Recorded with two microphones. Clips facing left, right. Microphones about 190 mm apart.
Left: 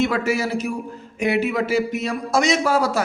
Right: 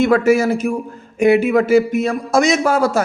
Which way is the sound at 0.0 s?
50° right (ahead or behind).